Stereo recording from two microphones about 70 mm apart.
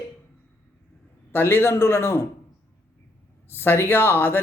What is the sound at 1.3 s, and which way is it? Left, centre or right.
Speech, left.